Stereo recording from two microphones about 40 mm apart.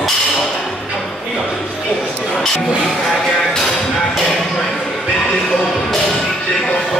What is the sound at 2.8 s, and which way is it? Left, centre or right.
Speech, centre.